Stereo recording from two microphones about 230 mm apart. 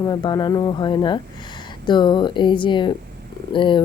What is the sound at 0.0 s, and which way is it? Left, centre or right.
A woman's voice, centre.